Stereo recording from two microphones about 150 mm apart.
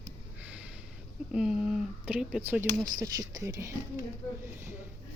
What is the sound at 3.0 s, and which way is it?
A woman's voice, 25° right (ahead or behind).